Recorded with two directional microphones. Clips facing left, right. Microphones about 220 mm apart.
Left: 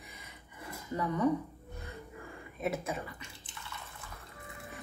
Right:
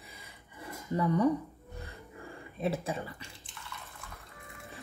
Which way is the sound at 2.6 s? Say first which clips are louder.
Right 2 dB; 30° right (ahead or behind).